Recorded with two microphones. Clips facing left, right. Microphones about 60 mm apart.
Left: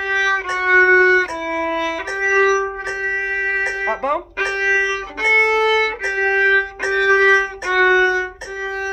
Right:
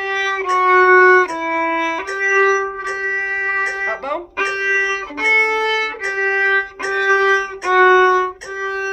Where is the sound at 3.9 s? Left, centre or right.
Centre.